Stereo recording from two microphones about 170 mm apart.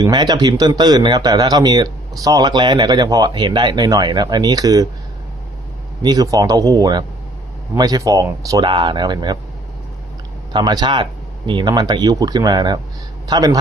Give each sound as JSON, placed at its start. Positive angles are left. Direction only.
{"t": 0.0, "sound": "speech", "side_deg": -25}
{"t": 6.0, "sound": "speech", "side_deg": -25}
{"t": 10.5, "sound": "speech", "side_deg": -25}